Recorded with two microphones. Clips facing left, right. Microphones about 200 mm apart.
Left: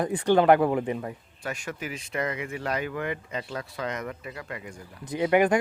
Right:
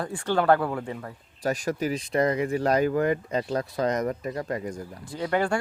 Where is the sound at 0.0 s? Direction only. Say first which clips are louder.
Left 4 dB; 20° left (ahead or behind).